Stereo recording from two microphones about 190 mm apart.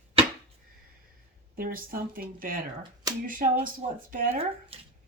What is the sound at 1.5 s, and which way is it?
Speech, 50° right (ahead or behind).